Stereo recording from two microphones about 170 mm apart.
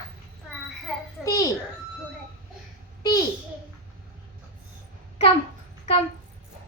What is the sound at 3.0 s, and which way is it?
Babbling, 20° left (ahead or behind).